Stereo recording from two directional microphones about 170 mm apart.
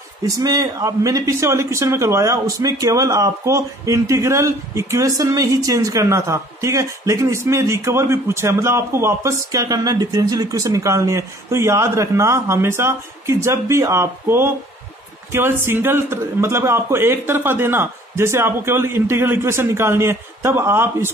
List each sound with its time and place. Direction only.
0.2 s a man's voice: 20° right (ahead or behind)